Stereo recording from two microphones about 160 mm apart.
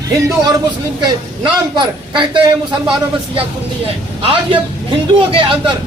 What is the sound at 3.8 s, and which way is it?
A man's voice, 35° right (ahead or behind).